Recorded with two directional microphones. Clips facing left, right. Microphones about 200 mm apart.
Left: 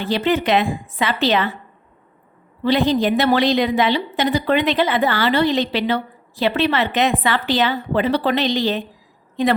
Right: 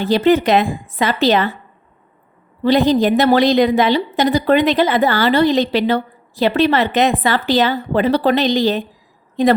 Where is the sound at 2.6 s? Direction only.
40° right (ahead or behind).